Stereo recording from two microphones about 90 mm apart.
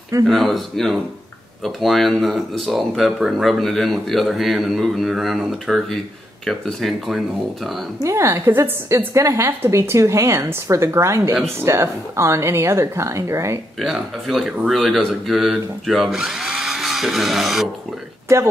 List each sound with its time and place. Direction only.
0.3 s speech: centre (ahead or behind)
8.0 s a woman's voice: 35° right (ahead or behind)
13.7 s speech: centre (ahead or behind)